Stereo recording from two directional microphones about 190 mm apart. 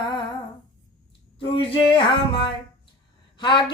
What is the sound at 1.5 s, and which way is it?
Speech, 30° left (ahead or behind).